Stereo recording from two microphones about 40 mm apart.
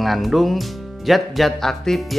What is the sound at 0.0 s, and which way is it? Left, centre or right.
Speech, centre.